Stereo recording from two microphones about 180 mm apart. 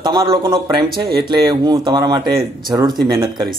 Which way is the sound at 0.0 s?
25° right (ahead or behind).